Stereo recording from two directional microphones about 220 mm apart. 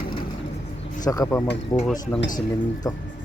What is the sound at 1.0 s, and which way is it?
Speech, 15° left (ahead or behind).